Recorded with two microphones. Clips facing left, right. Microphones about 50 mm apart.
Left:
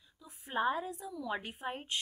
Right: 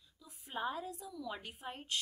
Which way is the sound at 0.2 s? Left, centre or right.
Left.